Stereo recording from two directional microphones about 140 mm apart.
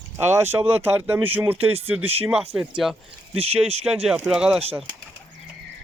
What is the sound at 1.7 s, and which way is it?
Speech, 45° right (ahead or behind).